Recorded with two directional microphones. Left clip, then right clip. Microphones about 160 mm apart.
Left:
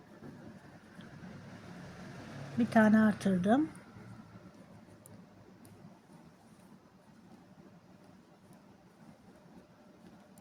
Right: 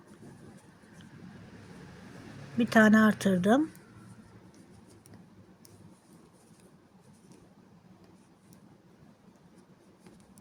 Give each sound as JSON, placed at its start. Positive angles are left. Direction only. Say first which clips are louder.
{"t": 2.6, "sound": "speech", "louder": "right 5 dB", "side_deg": -50}